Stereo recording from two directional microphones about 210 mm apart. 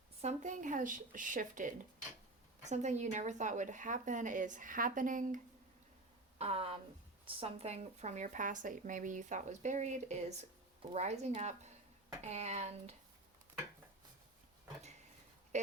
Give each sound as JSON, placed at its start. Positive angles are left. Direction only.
{"t": 0.2, "sound": "speech", "side_deg": -35}
{"t": 6.4, "sound": "speech", "side_deg": -25}
{"t": 15.5, "sound": "speech", "side_deg": -35}